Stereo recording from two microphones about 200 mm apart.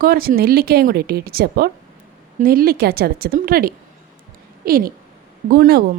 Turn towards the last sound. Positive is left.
turn(degrees=-50)  # may be behind; listen again after turning